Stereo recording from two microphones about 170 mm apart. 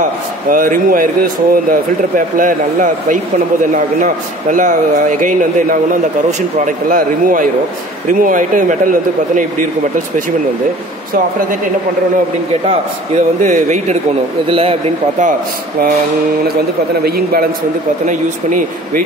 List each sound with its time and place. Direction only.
0.5 s speech: 55° right (ahead or behind)
12.6 s speech: 45° right (ahead or behind)
14.5 s a man's voice: 35° right (ahead or behind)
17.0 s a man's voice: 60° right (ahead or behind)
18.0 s speech: 50° right (ahead or behind)